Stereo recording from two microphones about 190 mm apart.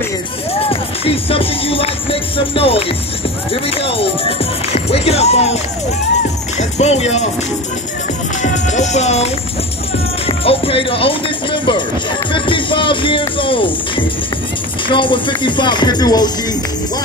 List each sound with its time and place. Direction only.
0.5 s music: 30° left (ahead or behind)
3.9 s speech: 30° left (ahead or behind)
6.8 s speech: 35° left (ahead or behind)
8.4 s music: 40° left (ahead or behind)
10.2 s speech: 30° left (ahead or behind)